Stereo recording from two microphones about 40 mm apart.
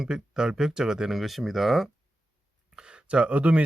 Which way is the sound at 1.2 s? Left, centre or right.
Centre.